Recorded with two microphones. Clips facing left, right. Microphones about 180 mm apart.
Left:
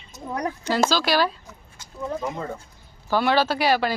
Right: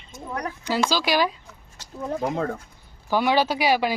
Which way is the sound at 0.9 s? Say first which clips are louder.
Left 1 dB; 15° right (ahead or behind).